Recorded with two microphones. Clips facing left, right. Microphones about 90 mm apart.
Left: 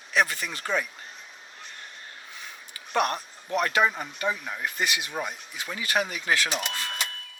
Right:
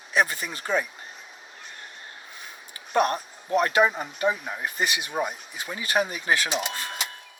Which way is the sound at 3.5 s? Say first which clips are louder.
Right 3 dB; 30° right (ahead or behind).